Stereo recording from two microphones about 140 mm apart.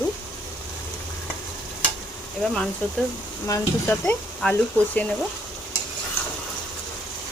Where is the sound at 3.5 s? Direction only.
20° left (ahead or behind).